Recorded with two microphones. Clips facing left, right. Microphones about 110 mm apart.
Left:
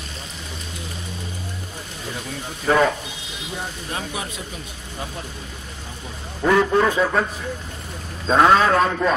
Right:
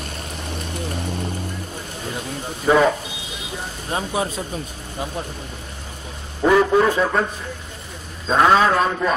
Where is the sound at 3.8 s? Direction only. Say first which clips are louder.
Right 10 dB; 30° right (ahead or behind).